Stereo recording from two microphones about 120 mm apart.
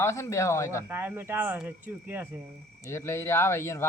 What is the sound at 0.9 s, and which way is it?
Speech, 20° right (ahead or behind).